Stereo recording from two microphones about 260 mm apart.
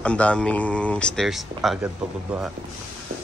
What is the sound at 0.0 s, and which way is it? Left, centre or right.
Speech, centre.